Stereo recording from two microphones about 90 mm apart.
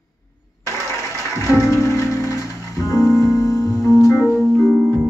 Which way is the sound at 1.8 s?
30° left (ahead or behind).